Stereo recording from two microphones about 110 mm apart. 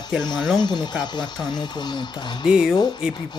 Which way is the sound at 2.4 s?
5° right (ahead or behind).